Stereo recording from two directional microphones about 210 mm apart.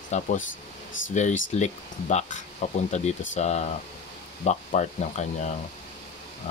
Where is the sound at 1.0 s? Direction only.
65° left (ahead or behind).